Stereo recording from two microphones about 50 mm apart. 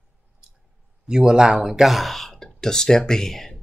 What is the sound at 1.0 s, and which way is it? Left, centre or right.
Speech, centre.